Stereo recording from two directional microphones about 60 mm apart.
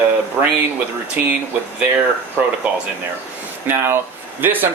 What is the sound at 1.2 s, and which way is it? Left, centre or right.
Speech, right.